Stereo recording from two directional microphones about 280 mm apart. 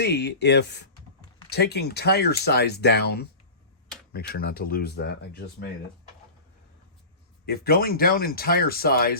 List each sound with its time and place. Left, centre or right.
0.0 s speech: left
7.4 s speech: left